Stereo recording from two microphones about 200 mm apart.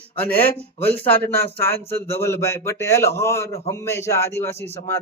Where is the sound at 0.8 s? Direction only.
55° right (ahead or behind).